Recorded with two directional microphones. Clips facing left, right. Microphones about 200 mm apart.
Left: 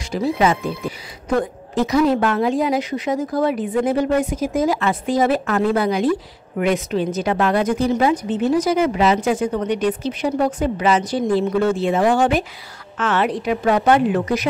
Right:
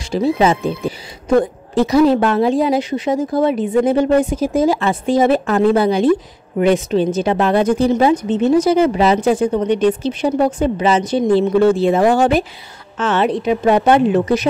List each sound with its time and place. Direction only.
0.1 s a woman's voice: 25° right (ahead or behind)
12.9 s a woman's voice: 25° right (ahead or behind)